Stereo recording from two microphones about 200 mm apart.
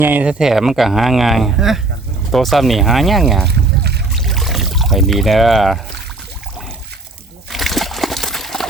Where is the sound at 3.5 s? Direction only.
55° right (ahead or behind).